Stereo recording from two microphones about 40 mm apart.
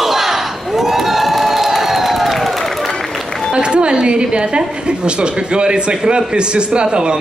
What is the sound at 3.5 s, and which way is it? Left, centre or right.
A woman's voice, right.